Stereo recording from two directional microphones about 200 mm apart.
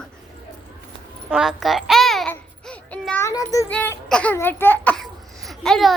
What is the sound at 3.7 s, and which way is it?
Speech, 5° left (ahead or behind).